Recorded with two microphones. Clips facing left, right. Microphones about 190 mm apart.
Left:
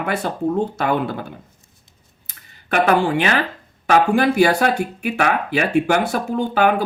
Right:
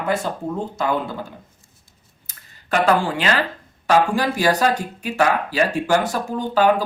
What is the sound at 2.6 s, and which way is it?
Speech, 60° left (ahead or behind).